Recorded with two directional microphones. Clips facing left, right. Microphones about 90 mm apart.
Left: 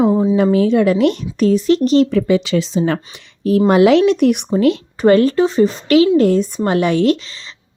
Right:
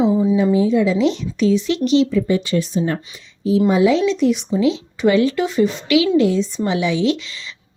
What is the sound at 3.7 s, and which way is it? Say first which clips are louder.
A woman's voice: left 6 dB; 65° left (ahead or behind).